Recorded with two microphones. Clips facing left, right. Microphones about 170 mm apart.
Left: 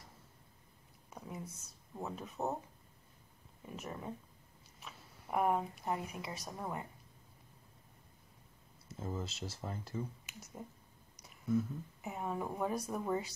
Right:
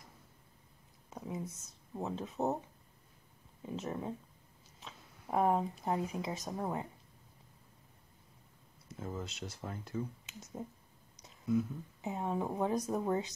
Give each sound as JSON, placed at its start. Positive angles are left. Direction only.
{"t": 1.1, "sound": "a sound", "side_deg": -20}
{"t": 2.0, "sound": "speech", "side_deg": -20}
{"t": 3.6, "sound": "speech", "side_deg": -25}
{"t": 5.3, "sound": "speech", "side_deg": -30}
{"t": 8.8, "sound": "speech", "side_deg": 5}
{"t": 10.2, "sound": "speech", "side_deg": -20}